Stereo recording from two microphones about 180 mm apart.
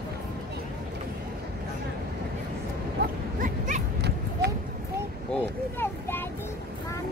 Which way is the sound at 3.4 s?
45° right (ahead or behind).